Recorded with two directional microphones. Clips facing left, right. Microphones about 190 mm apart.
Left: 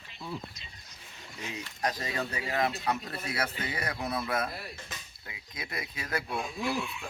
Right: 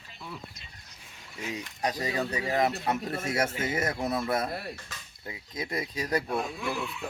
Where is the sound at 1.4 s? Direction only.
10° right (ahead or behind); by 5.6 s 30° right (ahead or behind).